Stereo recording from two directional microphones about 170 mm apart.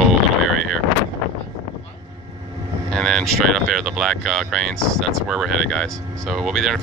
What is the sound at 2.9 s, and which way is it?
Speech, 5° left (ahead or behind).